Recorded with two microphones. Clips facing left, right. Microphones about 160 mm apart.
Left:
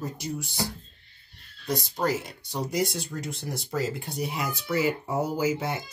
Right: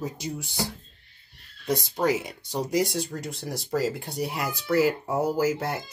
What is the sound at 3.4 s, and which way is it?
Speech, 5° right (ahead or behind).